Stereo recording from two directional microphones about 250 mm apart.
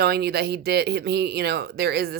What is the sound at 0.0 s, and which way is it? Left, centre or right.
Speech, right.